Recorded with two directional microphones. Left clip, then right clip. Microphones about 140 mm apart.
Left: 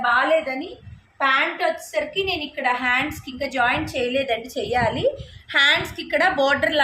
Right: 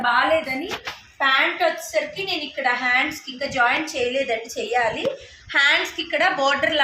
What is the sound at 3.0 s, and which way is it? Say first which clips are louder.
A woman's voice: right 1 dB; 35° left (ahead or behind).